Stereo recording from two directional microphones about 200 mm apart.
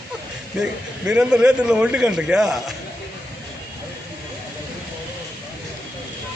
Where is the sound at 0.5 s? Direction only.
5° right (ahead or behind).